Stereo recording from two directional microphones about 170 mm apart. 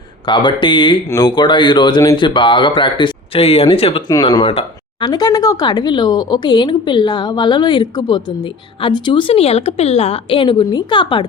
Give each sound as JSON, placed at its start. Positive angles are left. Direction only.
{"t": 0.3, "sound": "a woman's voice", "side_deg": 25}